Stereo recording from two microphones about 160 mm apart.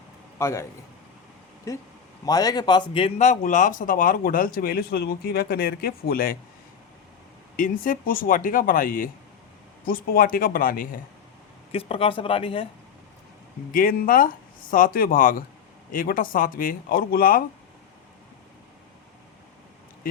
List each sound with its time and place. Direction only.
0.3 s a man's voice: 15° left (ahead or behind)
1.7 s speech: 20° left (ahead or behind); by 6.3 s 65° left (ahead or behind)
7.5 s speech: 60° left (ahead or behind)
11.7 s speech: 35° left (ahead or behind)
13.7 s speech: 60° left (ahead or behind)